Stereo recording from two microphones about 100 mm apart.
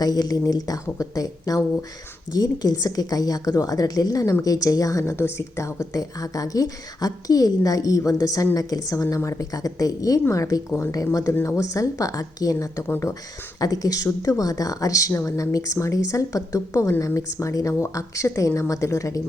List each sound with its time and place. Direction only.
0.0 s a woman's voice: 40° left (ahead or behind)
12.9 s speech: 25° left (ahead or behind)
13.6 s a woman's voice: 35° left (ahead or behind)